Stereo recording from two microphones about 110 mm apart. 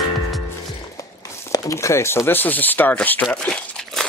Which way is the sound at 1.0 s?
30° left (ahead or behind).